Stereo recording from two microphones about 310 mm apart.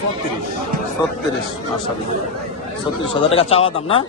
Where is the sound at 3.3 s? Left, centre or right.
Centre.